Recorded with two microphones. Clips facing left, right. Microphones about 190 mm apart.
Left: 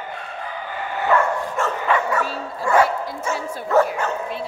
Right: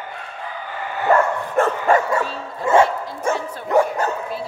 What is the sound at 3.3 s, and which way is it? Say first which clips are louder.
Bow-wow: right 5 dB; 55° right (ahead or behind).